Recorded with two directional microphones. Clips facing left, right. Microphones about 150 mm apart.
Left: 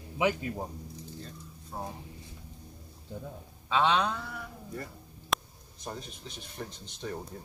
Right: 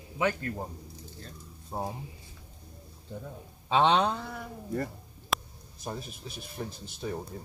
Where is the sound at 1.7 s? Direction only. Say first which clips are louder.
Right 4 dB; 30° right (ahead or behind).